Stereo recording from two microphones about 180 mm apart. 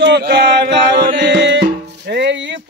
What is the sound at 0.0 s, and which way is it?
Music, 70° right (ahead or behind).